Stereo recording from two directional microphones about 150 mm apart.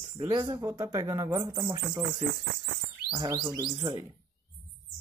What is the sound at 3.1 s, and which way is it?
Bird, 30° right (ahead or behind).